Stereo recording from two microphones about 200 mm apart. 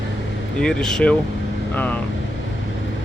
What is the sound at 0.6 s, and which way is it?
Speech, 5° left (ahead or behind).